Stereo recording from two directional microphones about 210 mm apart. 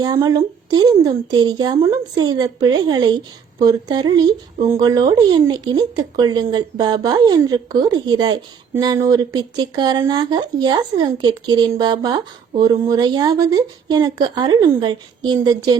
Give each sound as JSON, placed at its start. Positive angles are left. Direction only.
{"t": 0.0, "sound": "speech", "side_deg": -20}